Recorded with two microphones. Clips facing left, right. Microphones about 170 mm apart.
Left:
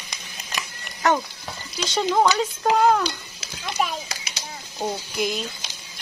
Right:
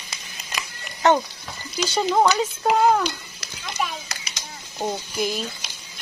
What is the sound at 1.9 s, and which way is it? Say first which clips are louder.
Speech: even; 5° right (ahead or behind).